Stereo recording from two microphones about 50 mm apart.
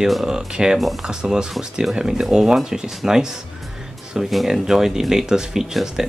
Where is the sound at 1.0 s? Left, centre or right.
Centre.